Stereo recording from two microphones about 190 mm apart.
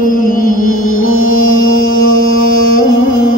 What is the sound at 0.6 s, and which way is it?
Music, 90° left.